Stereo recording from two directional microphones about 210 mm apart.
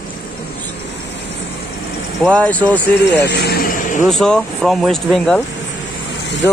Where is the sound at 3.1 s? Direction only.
50° left (ahead or behind).